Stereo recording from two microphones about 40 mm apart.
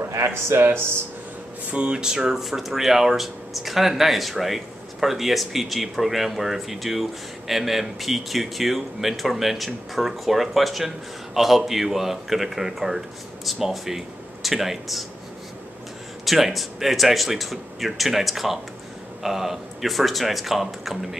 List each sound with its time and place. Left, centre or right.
0.3 s speech: right
1.7 s speech: right
2.0 s speech: centre
16.3 s speech: centre